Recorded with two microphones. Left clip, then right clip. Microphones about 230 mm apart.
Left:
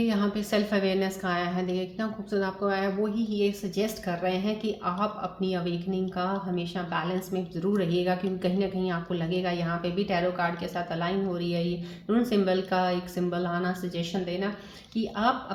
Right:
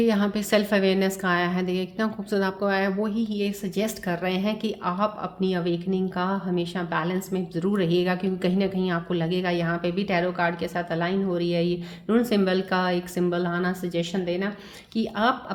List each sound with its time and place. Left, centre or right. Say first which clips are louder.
0.0 s a woman's voice: right 5 dB; right